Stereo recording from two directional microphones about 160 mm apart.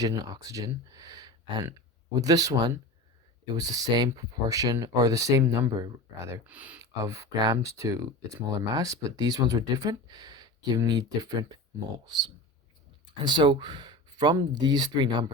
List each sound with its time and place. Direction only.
0.0 s speech: 25° right (ahead or behind); by 6.7 s 10° right (ahead or behind)
7.0 s speech: 20° right (ahead or behind)
13.2 s speech: 30° right (ahead or behind)